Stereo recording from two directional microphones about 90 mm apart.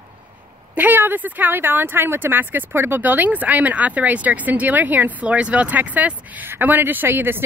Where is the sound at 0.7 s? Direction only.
20° right (ahead or behind).